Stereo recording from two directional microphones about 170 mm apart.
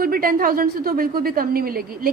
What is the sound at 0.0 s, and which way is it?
A woman's voice, 60° right (ahead or behind).